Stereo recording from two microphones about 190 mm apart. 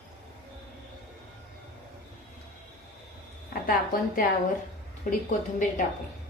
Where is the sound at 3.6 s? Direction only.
50° left (ahead or behind).